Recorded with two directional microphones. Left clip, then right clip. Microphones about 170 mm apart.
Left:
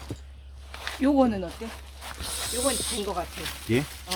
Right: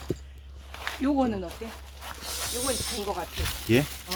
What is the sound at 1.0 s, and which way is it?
Speech, 60° left (ahead or behind).